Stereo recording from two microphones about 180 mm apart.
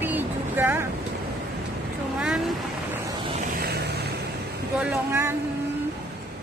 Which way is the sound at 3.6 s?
65° right (ahead or behind).